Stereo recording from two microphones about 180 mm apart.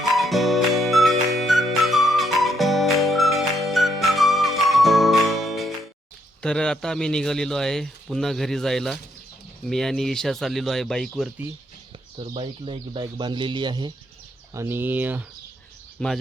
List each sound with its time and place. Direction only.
0.1 s music: centre (ahead or behind)
6.4 s speech: 5° left (ahead or behind)
12.3 s speech: 30° right (ahead or behind)
14.5 s speech: 15° right (ahead or behind)
16.0 s speech: 5° left (ahead or behind)